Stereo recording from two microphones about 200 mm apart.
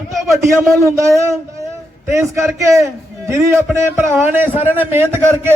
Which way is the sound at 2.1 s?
15° right (ahead or behind).